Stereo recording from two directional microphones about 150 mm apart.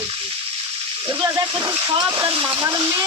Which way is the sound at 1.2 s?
30° right (ahead or behind).